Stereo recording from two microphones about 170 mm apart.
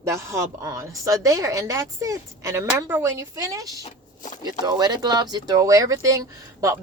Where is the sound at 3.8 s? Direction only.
45° left (ahead or behind).